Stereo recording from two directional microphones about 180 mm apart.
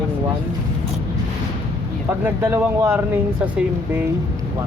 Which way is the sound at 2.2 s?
10° right (ahead or behind).